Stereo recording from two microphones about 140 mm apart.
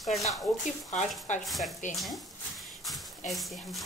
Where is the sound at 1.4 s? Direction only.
Centre (ahead or behind).